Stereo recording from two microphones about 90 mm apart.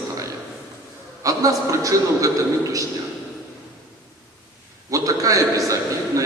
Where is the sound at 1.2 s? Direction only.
40° right (ahead or behind).